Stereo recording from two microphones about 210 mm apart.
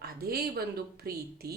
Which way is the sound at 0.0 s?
45° right (ahead or behind).